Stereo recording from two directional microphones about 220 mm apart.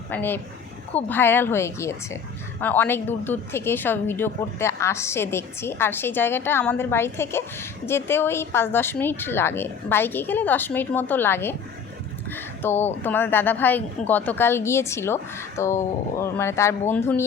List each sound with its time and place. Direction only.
0.1 s a woman's voice: 10° left (ahead or behind)